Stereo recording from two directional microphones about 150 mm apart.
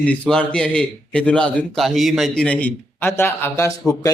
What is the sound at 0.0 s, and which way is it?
A man's voice, 5° left (ahead or behind).